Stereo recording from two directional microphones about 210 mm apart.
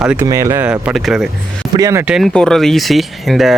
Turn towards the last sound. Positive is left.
turn(degrees=0)  # may be behind; listen again after turning